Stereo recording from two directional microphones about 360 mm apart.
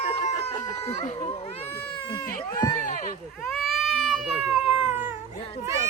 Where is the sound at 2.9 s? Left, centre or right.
Left.